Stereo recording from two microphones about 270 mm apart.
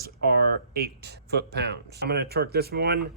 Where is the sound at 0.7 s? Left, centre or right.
Right.